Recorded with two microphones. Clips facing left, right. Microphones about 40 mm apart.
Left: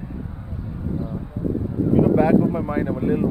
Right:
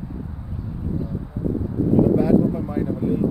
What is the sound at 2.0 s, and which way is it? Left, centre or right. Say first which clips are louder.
Speech: left 1 dB; left.